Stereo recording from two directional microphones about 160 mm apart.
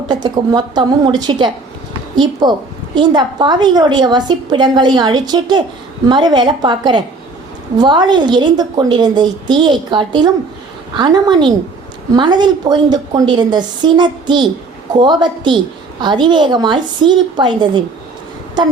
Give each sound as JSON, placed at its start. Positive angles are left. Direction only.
{"t": 0.1, "sound": "a woman's voice", "side_deg": -25}